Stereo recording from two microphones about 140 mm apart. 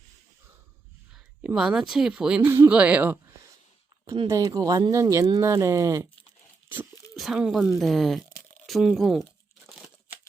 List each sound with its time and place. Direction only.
1.4 s speech: 5° right (ahead or behind)
2.5 s speech: 20° right (ahead or behind)
4.3 s speech: 25° right (ahead or behind)
7.2 s speech: 5° right (ahead or behind)